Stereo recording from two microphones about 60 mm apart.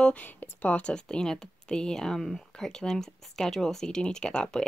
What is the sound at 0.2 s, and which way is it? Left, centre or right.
Speech, left.